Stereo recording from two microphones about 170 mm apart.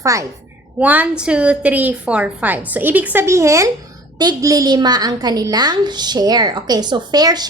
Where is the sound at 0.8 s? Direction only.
10° right (ahead or behind).